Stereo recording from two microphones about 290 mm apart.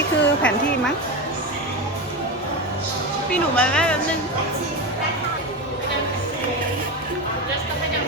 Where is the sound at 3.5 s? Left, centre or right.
Centre.